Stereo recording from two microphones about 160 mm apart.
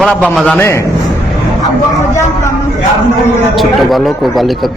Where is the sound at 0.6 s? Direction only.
15° left (ahead or behind).